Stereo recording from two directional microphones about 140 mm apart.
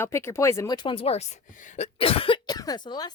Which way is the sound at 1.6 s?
60° left (ahead or behind).